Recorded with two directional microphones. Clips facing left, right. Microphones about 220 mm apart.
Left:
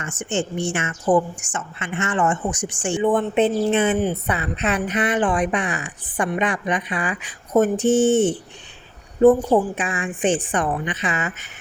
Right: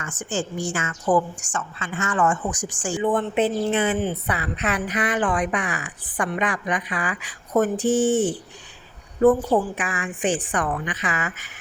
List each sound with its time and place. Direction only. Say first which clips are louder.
0.0 s a woman's voice: left 3 dB; 25° left (ahead or behind)